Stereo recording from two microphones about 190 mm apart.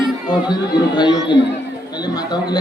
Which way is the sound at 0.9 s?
20° left (ahead or behind).